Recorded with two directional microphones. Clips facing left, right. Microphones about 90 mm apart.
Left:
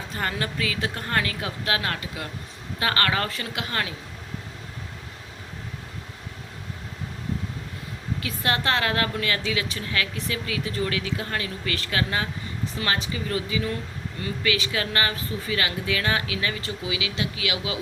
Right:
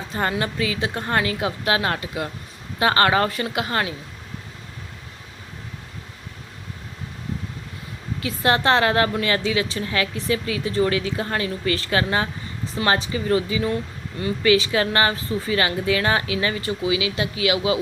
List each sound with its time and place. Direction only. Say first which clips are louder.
0.1 s a woman's voice: right 5 dB; 25° right (ahead or behind)
8.2 s a woman's voice: right 7 dB; 30° right (ahead or behind)